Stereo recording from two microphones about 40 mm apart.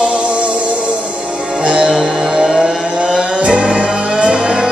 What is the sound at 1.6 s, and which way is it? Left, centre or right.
Music, right.